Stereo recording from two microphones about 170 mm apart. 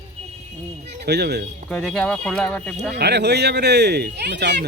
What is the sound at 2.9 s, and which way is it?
Speech, 75° right (ahead or behind).